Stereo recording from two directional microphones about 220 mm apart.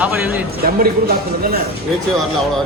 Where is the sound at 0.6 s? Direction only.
45° right (ahead or behind).